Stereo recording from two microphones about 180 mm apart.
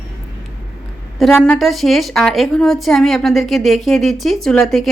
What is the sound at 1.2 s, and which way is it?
A woman's voice, 5° left (ahead or behind).